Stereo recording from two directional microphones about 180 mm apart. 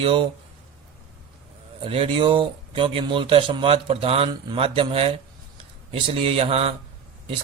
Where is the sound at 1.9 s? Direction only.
30° right (ahead or behind).